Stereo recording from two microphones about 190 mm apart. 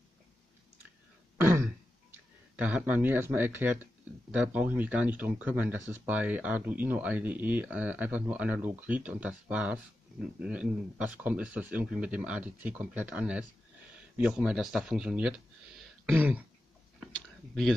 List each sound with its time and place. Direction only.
1.4 s throat clearing: 10° right (ahead or behind)
2.5 s speech: 10° right (ahead or behind)